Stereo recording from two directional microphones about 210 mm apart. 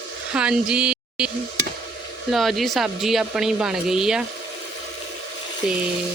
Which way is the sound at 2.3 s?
Centre (ahead or behind).